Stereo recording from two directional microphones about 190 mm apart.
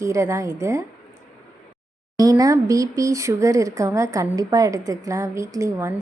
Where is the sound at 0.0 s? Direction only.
15° right (ahead or behind).